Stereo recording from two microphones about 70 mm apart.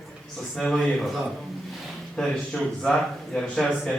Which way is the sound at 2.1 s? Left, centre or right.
Centre.